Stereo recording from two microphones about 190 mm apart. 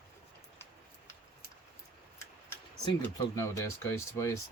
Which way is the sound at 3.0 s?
15° left (ahead or behind).